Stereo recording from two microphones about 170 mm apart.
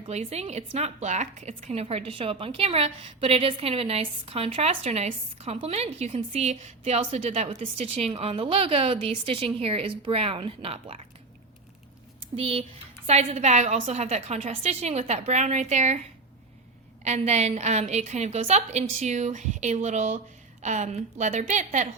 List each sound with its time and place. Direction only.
0.1 s a woman's voice: 40° right (ahead or behind)
12.4 s a woman's voice: 35° right (ahead or behind)
17.0 s a woman's voice: 40° right (ahead or behind)